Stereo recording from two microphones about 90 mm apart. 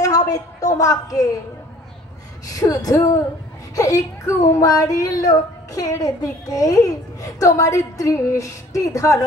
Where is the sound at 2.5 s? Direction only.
40° left (ahead or behind).